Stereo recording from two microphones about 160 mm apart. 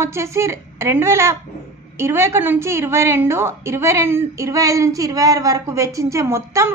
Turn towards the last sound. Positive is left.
turn(degrees=-20)  # may be behind; listen again after turning